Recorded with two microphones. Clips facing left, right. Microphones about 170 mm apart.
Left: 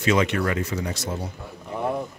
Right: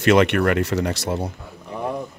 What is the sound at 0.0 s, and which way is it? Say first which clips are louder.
Speech: right 6 dB; 70° right (ahead or behind).